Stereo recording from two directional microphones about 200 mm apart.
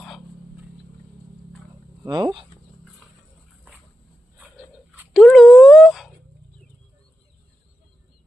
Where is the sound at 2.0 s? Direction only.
20° right (ahead or behind).